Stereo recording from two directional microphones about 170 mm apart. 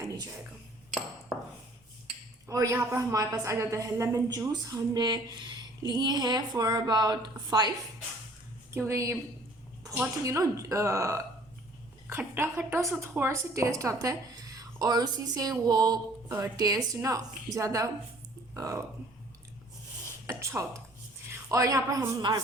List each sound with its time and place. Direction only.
2.5 s a woman's voice: 20° right (ahead or behind)
8.7 s speech: 15° right (ahead or behind)
10.2 s a woman's voice: 20° right (ahead or behind)
20.4 s a woman's voice: 15° right (ahead or behind)